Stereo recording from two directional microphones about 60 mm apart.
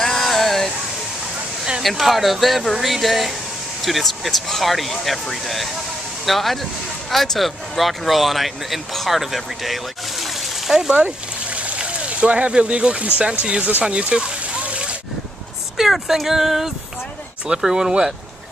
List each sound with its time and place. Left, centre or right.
0.0 s a sound: centre
1.8 s speech: centre
11.0 s speech: right
13.8 s splash: centre
15.8 s speech: centre